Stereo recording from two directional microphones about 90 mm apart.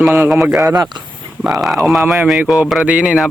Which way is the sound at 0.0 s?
20° right (ahead or behind).